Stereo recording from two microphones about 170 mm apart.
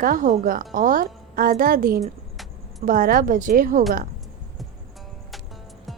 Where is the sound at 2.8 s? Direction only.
55° right (ahead or behind).